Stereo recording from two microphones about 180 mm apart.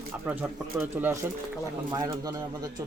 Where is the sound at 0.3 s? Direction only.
10° right (ahead or behind).